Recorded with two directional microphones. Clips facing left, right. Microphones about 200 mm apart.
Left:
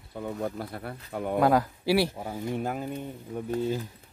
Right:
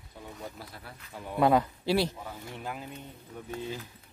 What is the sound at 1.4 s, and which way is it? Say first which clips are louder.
Speech: even; centre (ahead or behind).